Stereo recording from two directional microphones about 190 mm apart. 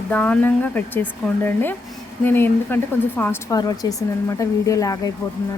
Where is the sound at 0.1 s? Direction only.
5° left (ahead or behind).